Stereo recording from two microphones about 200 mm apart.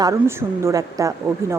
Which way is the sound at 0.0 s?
15° right (ahead or behind).